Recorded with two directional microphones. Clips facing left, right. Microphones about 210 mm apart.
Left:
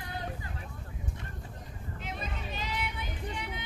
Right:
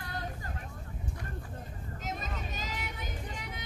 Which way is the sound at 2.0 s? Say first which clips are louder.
Right 1 dB; 40° right (ahead or behind).